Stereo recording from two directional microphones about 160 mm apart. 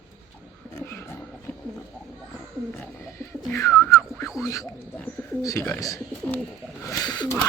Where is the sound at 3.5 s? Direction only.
15° left (ahead or behind).